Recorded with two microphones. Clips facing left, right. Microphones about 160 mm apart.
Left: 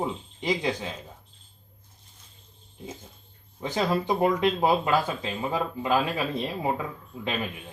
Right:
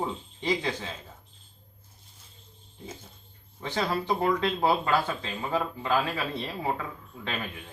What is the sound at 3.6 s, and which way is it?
Speech, 15° left (ahead or behind).